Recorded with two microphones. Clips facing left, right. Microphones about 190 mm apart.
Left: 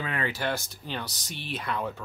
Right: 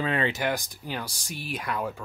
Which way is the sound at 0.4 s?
15° right (ahead or behind).